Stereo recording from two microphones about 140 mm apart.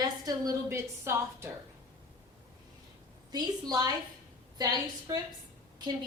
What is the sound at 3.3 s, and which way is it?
Speech, 30° right (ahead or behind).